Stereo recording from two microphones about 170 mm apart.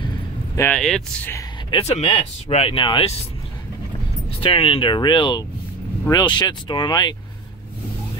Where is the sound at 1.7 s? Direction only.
35° left (ahead or behind).